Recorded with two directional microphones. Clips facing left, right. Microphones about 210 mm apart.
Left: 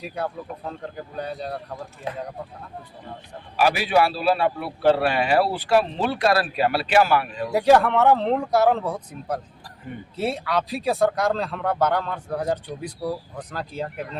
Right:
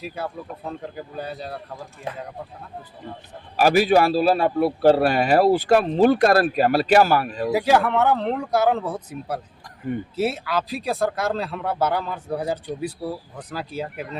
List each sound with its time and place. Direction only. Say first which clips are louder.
0.0 s speech: left 1 dB; 5° right (ahead or behind)
3.6 s a man's voice: right 3 dB; 45° right (ahead or behind)
7.5 s speech: left 2 dB; 5° right (ahead or behind)